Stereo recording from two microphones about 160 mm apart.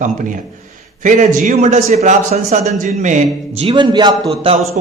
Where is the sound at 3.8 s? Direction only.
30° right (ahead or behind).